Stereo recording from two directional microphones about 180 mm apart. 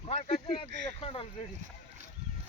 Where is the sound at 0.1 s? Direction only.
35° left (ahead or behind).